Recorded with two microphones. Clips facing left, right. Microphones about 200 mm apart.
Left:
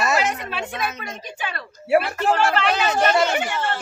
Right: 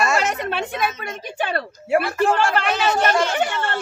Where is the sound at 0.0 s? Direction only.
5° left (ahead or behind).